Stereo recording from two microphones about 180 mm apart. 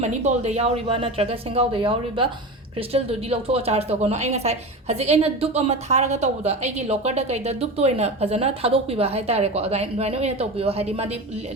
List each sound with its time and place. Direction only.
0.0 s a woman's voice: 40° right (ahead or behind)